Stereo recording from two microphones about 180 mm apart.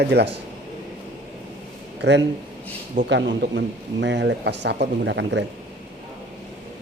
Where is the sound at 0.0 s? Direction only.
65° right (ahead or behind).